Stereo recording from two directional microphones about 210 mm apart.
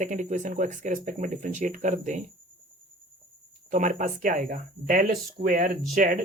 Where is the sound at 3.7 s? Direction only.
35° right (ahead or behind).